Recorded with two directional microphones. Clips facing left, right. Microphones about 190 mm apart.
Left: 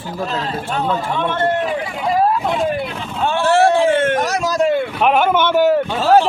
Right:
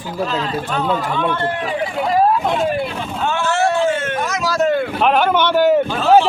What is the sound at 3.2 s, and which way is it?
Vehicle, 30° left (ahead or behind).